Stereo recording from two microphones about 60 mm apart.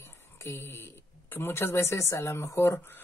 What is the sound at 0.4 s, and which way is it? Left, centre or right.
Speech, left.